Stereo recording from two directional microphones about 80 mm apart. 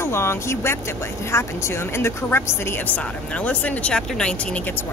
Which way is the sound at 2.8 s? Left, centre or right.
Centre.